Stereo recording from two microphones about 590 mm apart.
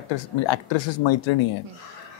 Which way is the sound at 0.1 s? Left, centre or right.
Left.